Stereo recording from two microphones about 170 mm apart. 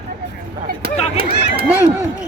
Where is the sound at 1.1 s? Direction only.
60° right (ahead or behind).